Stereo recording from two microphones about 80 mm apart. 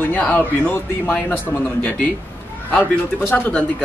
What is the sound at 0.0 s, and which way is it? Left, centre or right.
Speech, left.